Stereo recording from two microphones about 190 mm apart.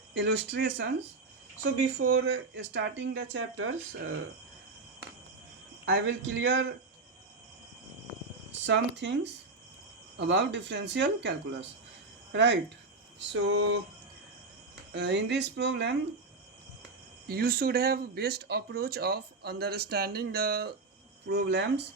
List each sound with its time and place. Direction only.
0.1 s speech: 65° right (ahead or behind)
2.0 s speech: 85° right
5.8 s speech: 80° right
8.6 s speech: 70° right (ahead or behind)
14.9 s speech: 65° right (ahead or behind)
17.2 s speech: 55° right (ahead or behind)